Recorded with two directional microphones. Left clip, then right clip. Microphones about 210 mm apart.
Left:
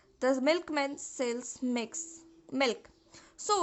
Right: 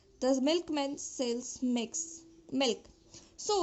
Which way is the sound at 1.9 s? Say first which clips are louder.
Right 3 dB; 30° left (ahead or behind).